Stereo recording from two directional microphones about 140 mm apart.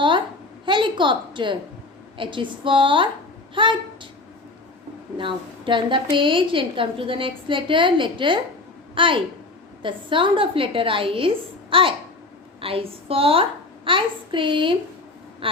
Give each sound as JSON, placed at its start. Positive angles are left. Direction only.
{"t": 0.6, "sound": "a sound", "side_deg": -35}
{"t": 2.1, "sound": "a woman's voice", "side_deg": -35}
{"t": 5.1, "sound": "a woman's voice", "side_deg": -35}